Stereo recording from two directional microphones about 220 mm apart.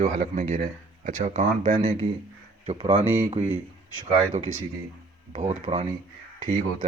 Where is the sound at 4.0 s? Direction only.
30° right (ahead or behind).